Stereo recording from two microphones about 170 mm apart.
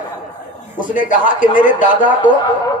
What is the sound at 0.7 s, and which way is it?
Speech, 50° left (ahead or behind).